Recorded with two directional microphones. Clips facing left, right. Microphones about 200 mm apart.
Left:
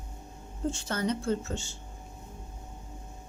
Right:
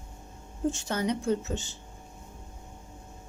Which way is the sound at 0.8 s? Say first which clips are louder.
Even; 15° right (ahead or behind).